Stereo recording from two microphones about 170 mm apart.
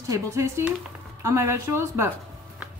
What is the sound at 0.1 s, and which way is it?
Speech, 15° right (ahead or behind).